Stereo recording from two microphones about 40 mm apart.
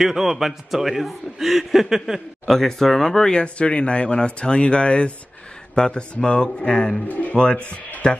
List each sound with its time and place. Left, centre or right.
0.0 s a man's voice: centre; by 6.9 s left
7.1 s speech: left
7.3 s speech: left